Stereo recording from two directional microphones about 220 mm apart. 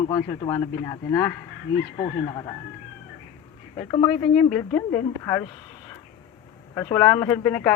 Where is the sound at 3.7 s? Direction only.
20° left (ahead or behind).